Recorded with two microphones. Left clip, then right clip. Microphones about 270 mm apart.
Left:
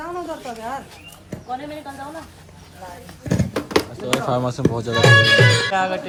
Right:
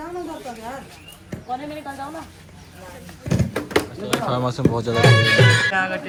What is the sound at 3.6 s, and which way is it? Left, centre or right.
Speech, centre.